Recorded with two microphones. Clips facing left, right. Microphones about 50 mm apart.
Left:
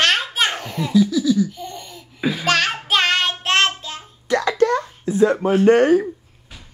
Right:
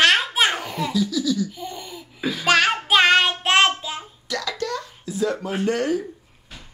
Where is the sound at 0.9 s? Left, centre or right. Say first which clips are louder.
Left 8 dB; centre.